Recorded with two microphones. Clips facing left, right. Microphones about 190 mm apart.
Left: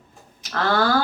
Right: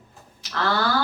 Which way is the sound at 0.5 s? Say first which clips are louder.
Left 3 dB; 50° left (ahead or behind).